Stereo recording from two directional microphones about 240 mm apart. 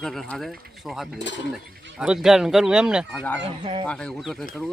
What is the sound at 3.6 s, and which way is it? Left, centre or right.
Speech, right.